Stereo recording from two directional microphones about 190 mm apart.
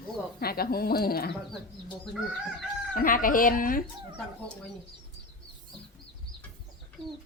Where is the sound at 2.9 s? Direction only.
45° left (ahead or behind).